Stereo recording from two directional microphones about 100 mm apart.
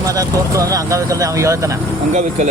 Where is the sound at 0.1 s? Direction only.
35° right (ahead or behind).